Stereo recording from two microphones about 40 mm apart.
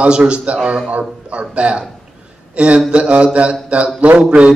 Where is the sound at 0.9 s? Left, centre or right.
Right.